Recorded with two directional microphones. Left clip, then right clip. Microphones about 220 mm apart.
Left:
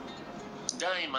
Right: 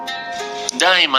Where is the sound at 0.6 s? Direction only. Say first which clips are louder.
Right 18 dB; 45° right (ahead or behind).